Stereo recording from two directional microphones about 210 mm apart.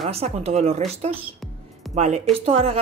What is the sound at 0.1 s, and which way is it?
Speech, 30° right (ahead or behind).